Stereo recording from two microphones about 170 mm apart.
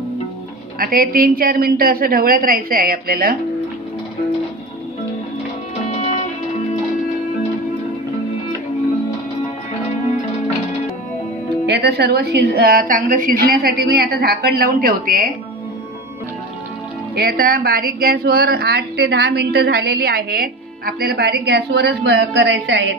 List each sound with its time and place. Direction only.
0.7 s a woman's voice: 60° right (ahead or behind)
11.6 s a woman's voice: 75° right (ahead or behind); by 15.3 s 60° right (ahead or behind)
17.1 s a woman's voice: 60° right (ahead or behind); by 22.8 s 90° right